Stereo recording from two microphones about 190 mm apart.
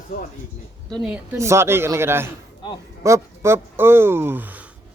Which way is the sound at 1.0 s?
10° right (ahead or behind).